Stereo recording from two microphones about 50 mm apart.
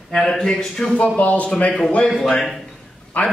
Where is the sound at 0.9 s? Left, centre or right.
Left.